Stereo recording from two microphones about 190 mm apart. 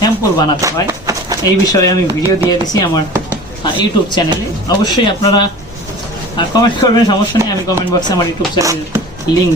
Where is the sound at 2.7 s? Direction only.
20° left (ahead or behind).